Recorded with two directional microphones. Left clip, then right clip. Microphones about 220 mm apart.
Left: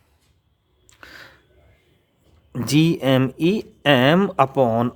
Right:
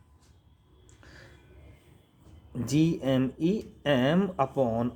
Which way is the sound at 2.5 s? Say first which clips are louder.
Left 8 dB; 40° left (ahead or behind).